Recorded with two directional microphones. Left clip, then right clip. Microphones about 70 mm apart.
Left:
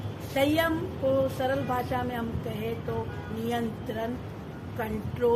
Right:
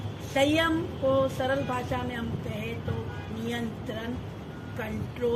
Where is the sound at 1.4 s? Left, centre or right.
Centre.